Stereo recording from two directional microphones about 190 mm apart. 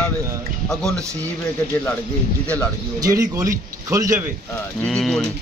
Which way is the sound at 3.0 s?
15° right (ahead or behind).